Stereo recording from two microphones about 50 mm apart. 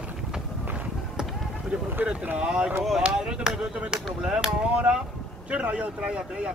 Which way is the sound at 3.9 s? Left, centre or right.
Centre.